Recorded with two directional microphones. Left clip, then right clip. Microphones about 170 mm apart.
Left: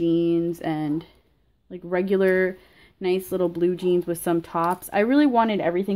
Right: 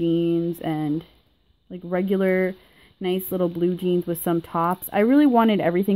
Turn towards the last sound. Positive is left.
turn(degrees=-45)  # may be behind; listen again after turning